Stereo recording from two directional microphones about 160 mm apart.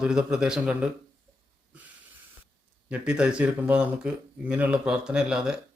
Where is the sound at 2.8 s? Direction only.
5° right (ahead or behind).